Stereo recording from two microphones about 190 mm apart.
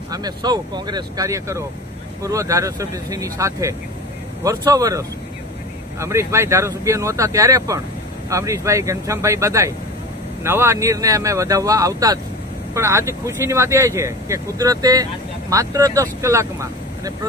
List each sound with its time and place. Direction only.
0.1 s speech: 20° right (ahead or behind)